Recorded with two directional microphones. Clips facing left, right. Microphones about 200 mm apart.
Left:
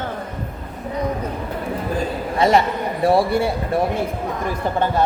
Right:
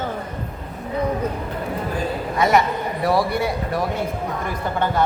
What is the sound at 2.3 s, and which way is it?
A man's voice, 30° left (ahead or behind).